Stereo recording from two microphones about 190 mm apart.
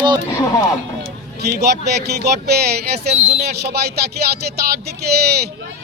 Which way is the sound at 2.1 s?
60° right (ahead or behind).